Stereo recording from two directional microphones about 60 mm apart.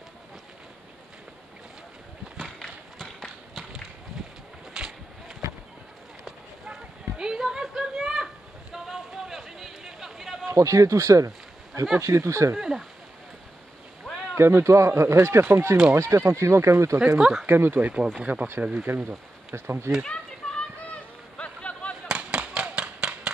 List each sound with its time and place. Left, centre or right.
2.4 s horse: centre
4.7 s a sound: centre
10.5 s speech: right
12.5 s speech: centre
14.3 s speech: right
17.2 s speech: centre
17.5 s speech: right
17.7 s speech: right
19.0 s speech: right
20.1 s a sound: centre
22.0 s a sound: centre